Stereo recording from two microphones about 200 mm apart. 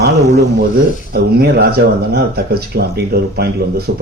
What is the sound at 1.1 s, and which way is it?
Speech, 50° right (ahead or behind).